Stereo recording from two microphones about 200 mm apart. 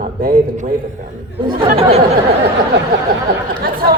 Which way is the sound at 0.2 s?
40° right (ahead or behind).